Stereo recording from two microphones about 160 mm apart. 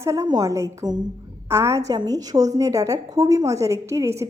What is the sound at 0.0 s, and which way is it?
A woman's voice, 20° right (ahead or behind).